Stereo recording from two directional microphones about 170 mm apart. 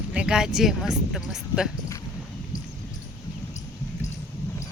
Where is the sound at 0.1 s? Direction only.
5° right (ahead or behind).